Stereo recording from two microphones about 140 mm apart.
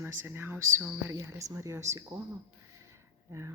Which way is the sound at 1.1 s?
25° right (ahead or behind).